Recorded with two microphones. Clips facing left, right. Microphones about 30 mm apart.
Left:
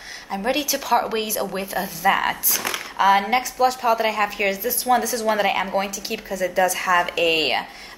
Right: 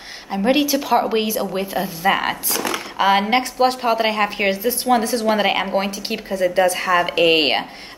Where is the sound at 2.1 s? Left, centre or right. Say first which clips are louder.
Right 1 dB; right.